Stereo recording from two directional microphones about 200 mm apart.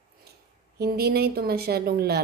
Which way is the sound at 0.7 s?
50° right (ahead or behind).